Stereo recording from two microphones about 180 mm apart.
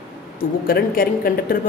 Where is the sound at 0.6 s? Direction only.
55° left (ahead or behind).